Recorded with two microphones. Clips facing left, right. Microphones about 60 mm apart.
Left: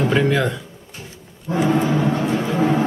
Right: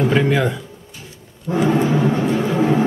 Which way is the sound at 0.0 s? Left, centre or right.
Centre.